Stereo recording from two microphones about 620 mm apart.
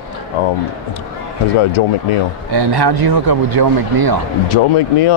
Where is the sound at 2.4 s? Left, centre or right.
Right.